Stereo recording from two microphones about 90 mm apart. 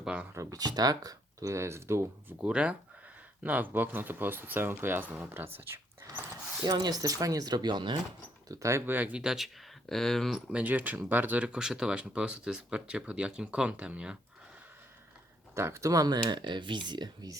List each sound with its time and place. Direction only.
0.0 s speech: 10° right (ahead or behind)
0.3 s speech: 45° right (ahead or behind)
2.4 s speech: 10° right (ahead or behind)
6.6 s speech: 50° right (ahead or behind)
8.4 s speech: 35° right (ahead or behind)
8.9 s speech: 20° right (ahead or behind)
9.2 s speech: 5° right (ahead or behind)
10.5 s speech: 20° right (ahead or behind)
15.5 s speech: 30° right (ahead or behind); by 17.3 s 50° right (ahead or behind)